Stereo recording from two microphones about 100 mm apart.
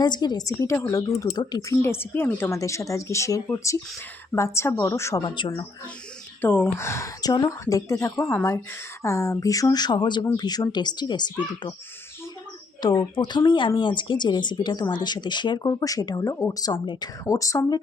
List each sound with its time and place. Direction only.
0.0 s a woman's voice: 45° left (ahead or behind)
1.2 s speech: 45° left (ahead or behind)
1.7 s a woman's voice: 25° left (ahead or behind)
2.6 s a woman's voice: 30° left (ahead or behind)
5.2 s speech: 55° left (ahead or behind)
6.4 s a woman's voice: 20° left (ahead or behind); by 11.7 s 50° left (ahead or behind)
12.8 s speech: 50° left (ahead or behind)
16.8 s speech: 50° left (ahead or behind)
17.2 s a woman's voice: 35° left (ahead or behind)